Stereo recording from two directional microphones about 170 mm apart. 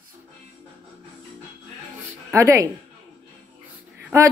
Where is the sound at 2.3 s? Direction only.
15° right (ahead or behind).